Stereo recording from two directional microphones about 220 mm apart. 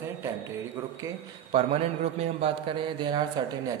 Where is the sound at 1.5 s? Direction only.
25° right (ahead or behind).